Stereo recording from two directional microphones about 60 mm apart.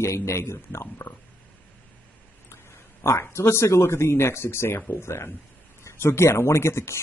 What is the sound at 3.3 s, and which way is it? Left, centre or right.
Speech, left.